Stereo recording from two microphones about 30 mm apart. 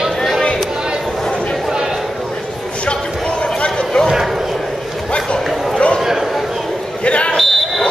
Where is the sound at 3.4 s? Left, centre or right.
Left.